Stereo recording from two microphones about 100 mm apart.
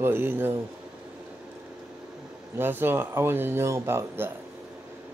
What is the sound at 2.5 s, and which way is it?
Speech, 20° right (ahead or behind).